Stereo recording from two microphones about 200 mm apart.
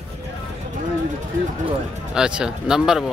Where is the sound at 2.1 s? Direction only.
5° right (ahead or behind).